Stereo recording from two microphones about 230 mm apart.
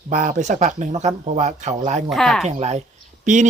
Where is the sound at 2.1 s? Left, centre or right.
Centre.